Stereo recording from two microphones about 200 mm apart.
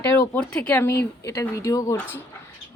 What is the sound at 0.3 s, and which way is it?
Speech, 5° left (ahead or behind).